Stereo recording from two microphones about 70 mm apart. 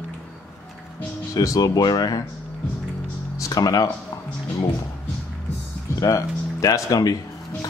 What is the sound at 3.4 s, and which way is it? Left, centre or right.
Speech, left.